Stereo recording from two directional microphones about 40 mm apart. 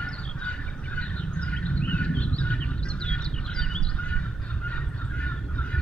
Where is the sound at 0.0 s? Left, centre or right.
Left.